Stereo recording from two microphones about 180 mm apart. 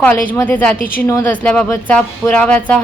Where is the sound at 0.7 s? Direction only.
50° left (ahead or behind).